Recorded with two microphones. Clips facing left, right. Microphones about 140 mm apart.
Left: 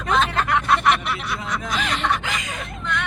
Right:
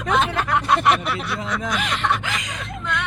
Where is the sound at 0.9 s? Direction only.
30° right (ahead or behind).